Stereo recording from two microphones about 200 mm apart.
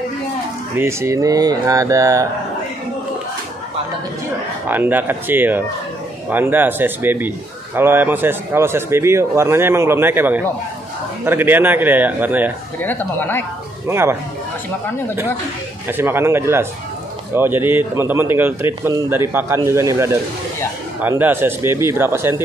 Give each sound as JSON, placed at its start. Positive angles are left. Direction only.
{"t": 0.7, "sound": "a man's voice", "side_deg": -15}
{"t": 4.6, "sound": "a man's voice", "side_deg": -10}
{"t": 12.8, "sound": "speech", "side_deg": 10}
{"t": 13.8, "sound": "a man's voice", "side_deg": -10}
{"t": 15.9, "sound": "a man's voice", "side_deg": -10}